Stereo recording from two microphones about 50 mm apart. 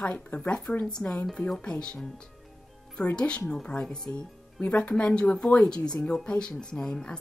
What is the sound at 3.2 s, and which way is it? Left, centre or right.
Speech, left.